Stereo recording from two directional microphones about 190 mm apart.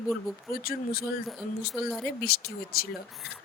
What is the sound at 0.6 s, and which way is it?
Speech, 50° left (ahead or behind).